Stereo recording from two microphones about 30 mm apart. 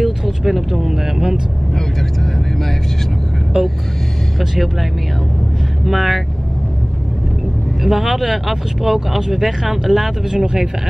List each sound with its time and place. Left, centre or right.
0.0 s speech: centre
3.6 s speech: right
5.9 s speech: centre
7.8 s speech: centre
10.3 s speech: right